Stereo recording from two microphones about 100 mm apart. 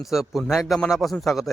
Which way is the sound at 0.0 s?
5° right (ahead or behind).